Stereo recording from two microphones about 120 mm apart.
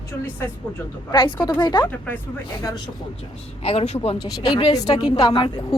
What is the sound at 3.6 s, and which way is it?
Speech, 55° left (ahead or behind).